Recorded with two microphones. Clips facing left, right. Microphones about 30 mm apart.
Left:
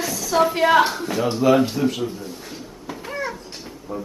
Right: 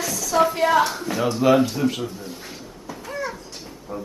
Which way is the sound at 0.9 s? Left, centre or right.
Centre.